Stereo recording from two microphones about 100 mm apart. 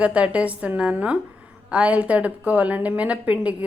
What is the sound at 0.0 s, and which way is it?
A woman's voice, 10° right (ahead or behind).